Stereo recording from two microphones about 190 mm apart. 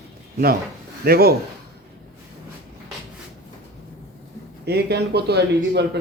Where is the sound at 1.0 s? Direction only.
55° right (ahead or behind).